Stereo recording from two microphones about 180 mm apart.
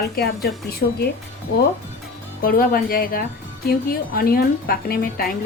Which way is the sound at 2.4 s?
55° left (ahead or behind).